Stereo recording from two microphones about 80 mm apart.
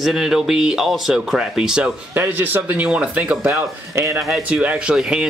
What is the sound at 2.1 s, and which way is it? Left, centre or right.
Speech, right.